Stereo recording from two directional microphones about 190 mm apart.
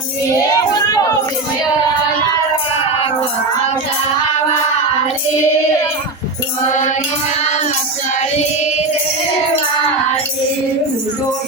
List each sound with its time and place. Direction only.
0.3 s child singing: 20° left (ahead or behind)
7.4 s music: 40° left (ahead or behind)